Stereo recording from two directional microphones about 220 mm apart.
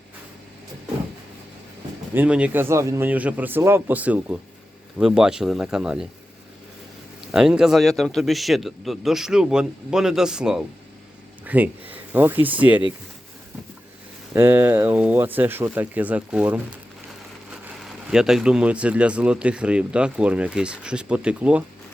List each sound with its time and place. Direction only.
2.1 s speech: 5° right (ahead or behind)
7.3 s speech: centre (ahead or behind)
14.3 s speech: 10° right (ahead or behind)